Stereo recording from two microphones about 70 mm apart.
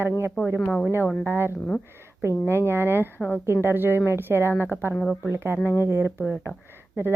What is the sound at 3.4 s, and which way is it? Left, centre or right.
Speech, right.